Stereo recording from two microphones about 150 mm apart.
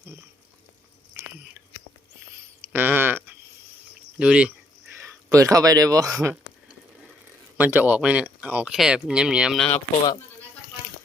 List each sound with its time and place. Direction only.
2.7 s a sound: 15° right (ahead or behind)
4.2 s speech: 10° right (ahead or behind)
4.9 s speech: 20° right (ahead or behind)
7.5 s speech: 10° right (ahead or behind)